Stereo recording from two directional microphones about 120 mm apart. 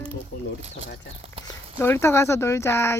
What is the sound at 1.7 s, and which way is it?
Speech, 20° left (ahead or behind).